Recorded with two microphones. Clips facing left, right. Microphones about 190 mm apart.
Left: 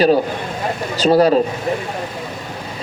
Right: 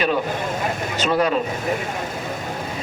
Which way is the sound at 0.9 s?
35° left (ahead or behind).